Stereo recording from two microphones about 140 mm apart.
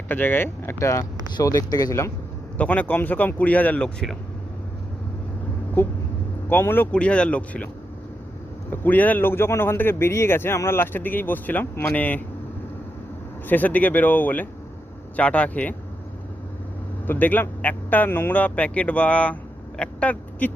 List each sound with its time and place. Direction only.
0.1 s a man's voice: 15° left (ahead or behind)
6.5 s a man's voice: 15° left (ahead or behind)
8.7 s a man's voice: 15° left (ahead or behind)
13.5 s a man's voice: 10° left (ahead or behind)
17.1 s speech: 10° left (ahead or behind)